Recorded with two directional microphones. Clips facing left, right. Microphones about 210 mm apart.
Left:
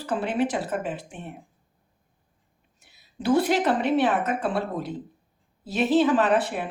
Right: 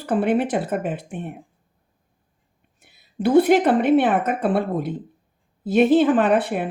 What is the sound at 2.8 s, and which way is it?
A woman's voice, 55° right (ahead or behind).